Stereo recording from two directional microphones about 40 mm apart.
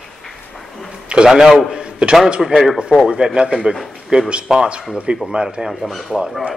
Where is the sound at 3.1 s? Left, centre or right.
Centre.